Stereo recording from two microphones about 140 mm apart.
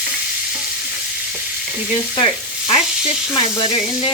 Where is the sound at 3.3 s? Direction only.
40° left (ahead or behind).